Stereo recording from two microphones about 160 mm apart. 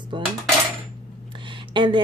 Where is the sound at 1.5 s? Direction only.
30° right (ahead or behind).